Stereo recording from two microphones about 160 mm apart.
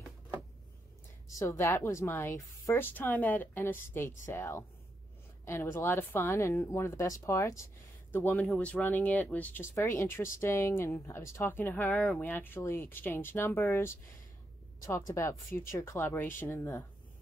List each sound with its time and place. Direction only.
1.4 s speech: 15° left (ahead or behind)